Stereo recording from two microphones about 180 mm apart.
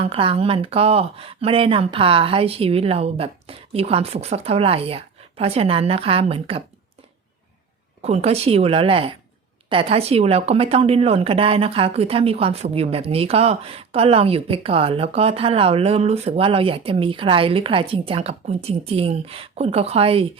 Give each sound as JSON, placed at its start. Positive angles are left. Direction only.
{"t": 0.0, "sound": "a woman's voice", "side_deg": -30}
{"t": 8.0, "sound": "a woman's voice", "side_deg": -35}